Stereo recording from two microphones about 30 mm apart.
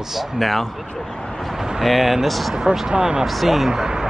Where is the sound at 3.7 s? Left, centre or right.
Right.